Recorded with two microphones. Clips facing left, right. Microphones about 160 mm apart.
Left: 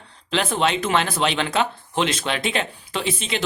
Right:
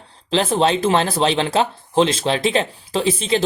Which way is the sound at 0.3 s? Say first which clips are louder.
Right 5 dB; 30° right (ahead or behind).